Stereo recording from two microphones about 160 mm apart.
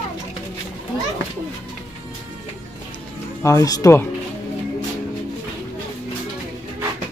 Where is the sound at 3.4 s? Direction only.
20° left (ahead or behind).